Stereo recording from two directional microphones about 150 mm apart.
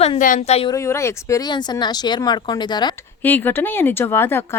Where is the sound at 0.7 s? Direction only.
20° left (ahead or behind).